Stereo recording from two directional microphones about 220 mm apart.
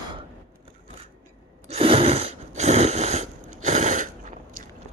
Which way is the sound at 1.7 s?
25° right (ahead or behind).